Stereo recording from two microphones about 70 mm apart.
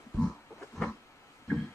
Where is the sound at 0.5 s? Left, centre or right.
Centre.